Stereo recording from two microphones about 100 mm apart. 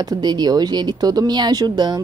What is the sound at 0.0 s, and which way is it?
Speech, 45° right (ahead or behind).